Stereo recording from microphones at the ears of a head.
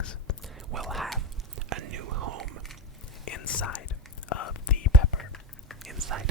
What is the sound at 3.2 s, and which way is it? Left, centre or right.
Whispering, left.